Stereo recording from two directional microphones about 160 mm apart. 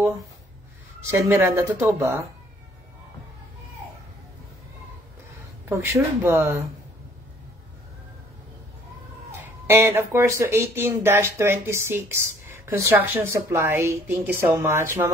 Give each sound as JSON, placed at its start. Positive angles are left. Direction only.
{"t": 0.0, "sound": "speech", "side_deg": -20}
{"t": 5.7, "sound": "speech", "side_deg": -15}
{"t": 9.3, "sound": "speech", "side_deg": -15}